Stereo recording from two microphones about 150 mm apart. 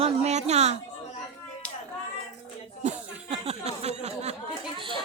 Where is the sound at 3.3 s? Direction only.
40° right (ahead or behind).